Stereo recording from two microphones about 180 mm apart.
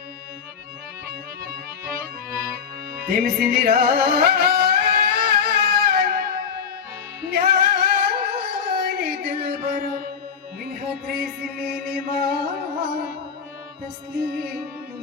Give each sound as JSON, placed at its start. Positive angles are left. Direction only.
{"t": 1.0, "sound": "music", "side_deg": -55}
{"t": 3.1, "sound": "music", "side_deg": -60}